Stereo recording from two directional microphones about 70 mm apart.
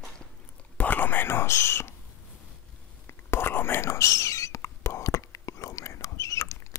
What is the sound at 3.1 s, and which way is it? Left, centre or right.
Whispering, left.